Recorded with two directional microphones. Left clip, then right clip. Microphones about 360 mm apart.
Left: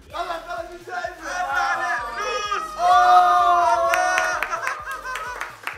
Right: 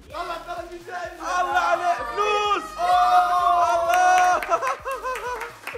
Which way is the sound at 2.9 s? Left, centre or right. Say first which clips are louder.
Left 4 dB; left.